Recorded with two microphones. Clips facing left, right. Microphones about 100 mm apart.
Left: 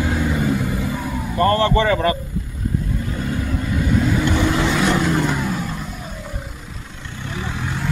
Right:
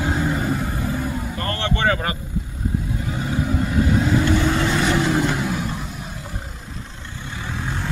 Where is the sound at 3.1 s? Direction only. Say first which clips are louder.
Right 3 dB; 5° right (ahead or behind).